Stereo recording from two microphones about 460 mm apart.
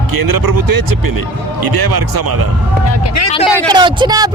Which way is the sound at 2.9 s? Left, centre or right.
Left.